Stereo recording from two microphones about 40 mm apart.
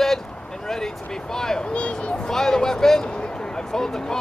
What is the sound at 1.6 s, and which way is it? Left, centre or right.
Speech, left.